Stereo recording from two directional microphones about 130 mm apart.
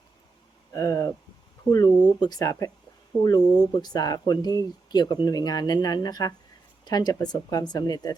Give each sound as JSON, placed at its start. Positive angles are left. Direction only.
{"t": 0.7, "sound": "speech", "side_deg": 25}